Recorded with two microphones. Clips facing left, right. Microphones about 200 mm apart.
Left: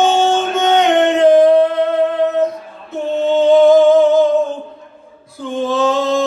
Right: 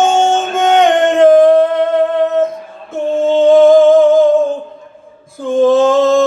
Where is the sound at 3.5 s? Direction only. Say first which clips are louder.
Right 2 dB; 50° right (ahead or behind).